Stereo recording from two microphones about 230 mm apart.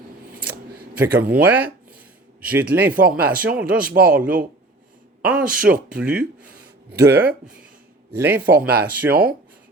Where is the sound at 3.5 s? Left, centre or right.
Centre.